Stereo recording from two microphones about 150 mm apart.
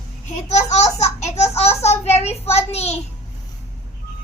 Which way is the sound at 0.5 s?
50° left (ahead or behind).